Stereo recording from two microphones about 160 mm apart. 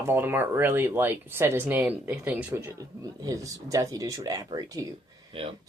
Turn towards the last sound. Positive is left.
turn(degrees=-35)  # may be behind; listen again after turning